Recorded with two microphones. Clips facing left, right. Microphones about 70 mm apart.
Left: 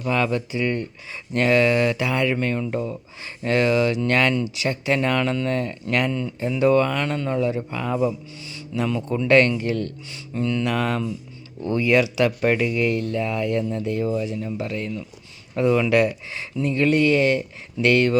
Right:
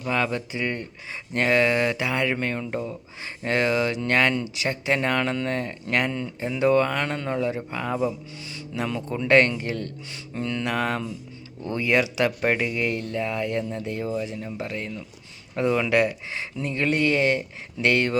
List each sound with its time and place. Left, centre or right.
0.0 s speech: right
8.4 s speech: right